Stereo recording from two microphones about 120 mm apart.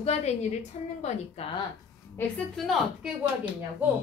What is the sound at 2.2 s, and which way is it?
Speech, 20° left (ahead or behind).